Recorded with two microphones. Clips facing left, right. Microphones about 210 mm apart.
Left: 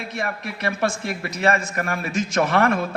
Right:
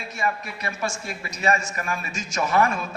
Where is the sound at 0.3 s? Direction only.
70° left (ahead or behind).